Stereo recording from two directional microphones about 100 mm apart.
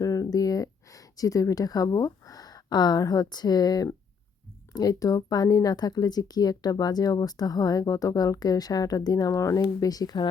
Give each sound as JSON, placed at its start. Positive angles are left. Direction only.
{"t": 0.0, "sound": "speech", "side_deg": 35}